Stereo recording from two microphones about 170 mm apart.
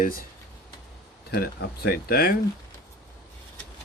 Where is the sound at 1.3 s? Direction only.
70° left (ahead or behind).